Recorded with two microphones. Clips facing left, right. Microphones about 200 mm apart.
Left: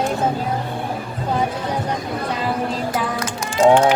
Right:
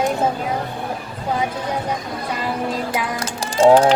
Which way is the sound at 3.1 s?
30° right (ahead or behind).